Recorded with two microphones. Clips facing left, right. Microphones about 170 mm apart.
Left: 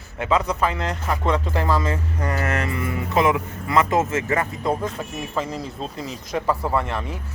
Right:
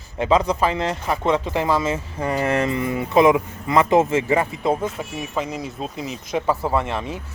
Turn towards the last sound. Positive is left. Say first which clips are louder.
# right 1 dB
turn(degrees=-20)  # may be behind; listen again after turning